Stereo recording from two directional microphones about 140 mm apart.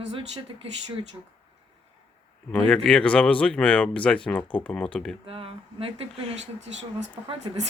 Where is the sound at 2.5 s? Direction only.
5° left (ahead or behind).